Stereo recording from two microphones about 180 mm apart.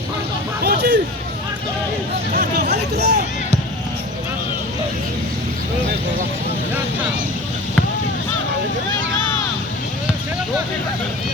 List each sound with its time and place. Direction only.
0.6 s hubbub: 65° right (ahead or behind)
2.3 s speech: 55° right (ahead or behind)